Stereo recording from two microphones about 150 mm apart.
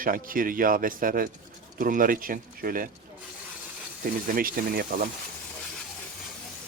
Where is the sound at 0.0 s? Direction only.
70° right (ahead or behind).